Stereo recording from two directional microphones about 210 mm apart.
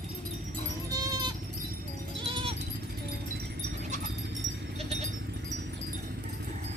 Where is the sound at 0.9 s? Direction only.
20° right (ahead or behind).